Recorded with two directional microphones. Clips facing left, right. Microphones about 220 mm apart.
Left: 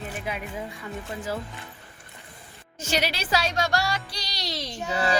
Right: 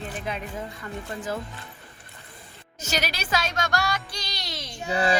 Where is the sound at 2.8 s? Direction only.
30° left (ahead or behind).